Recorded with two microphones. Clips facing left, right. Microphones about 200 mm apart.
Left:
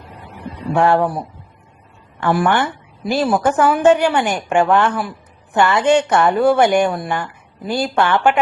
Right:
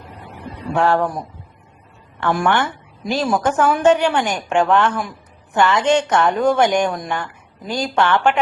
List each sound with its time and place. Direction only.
0.8 s a woman's voice: 10° left (ahead or behind)
2.2 s a woman's voice: 5° left (ahead or behind)